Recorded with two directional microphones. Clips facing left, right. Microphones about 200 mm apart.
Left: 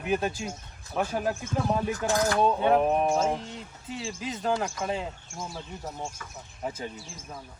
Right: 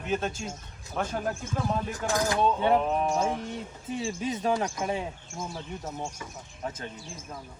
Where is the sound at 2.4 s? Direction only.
15° left (ahead or behind).